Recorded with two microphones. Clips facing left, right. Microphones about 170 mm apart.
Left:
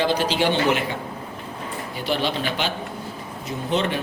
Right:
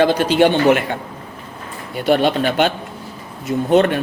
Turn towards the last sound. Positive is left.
turn(degrees=-55)  # may be behind; listen again after turning